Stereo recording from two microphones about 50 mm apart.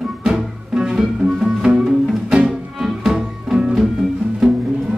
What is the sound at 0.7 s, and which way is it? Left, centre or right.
Music, centre.